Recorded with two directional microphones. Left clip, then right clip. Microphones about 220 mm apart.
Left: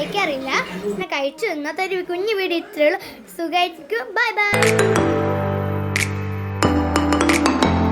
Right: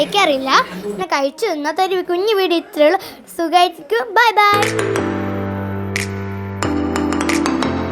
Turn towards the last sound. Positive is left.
turn(degrees=0)  # may be behind; listen again after turning